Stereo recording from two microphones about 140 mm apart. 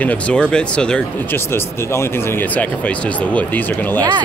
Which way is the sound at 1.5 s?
20° left (ahead or behind).